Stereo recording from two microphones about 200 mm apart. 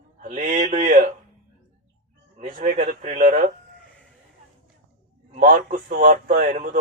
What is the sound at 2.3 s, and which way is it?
A man's voice, 35° right (ahead or behind).